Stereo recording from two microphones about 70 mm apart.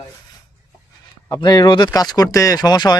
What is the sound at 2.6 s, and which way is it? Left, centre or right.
Speech, left.